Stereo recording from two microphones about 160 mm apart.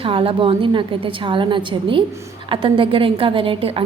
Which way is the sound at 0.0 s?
35° right (ahead or behind).